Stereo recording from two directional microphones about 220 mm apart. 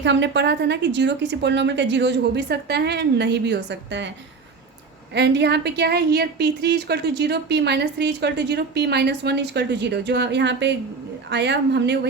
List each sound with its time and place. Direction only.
0.0 s a woman's voice: 55° right (ahead or behind)
5.1 s a woman's voice: 50° right (ahead or behind)